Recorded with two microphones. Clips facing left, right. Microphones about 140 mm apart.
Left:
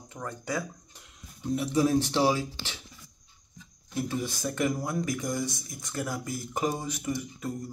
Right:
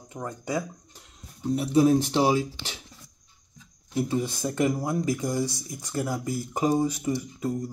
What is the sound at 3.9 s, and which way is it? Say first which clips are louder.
Speech: right 5 dB; 25° right (ahead or behind).